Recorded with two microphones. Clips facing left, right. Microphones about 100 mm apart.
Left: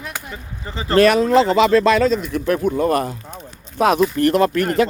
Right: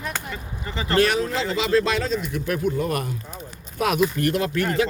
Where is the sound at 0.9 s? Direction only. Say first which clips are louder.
Left 8 dB; 70° left (ahead or behind).